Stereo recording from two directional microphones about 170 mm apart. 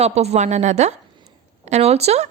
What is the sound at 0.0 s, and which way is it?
A woman's voice, 40° right (ahead or behind).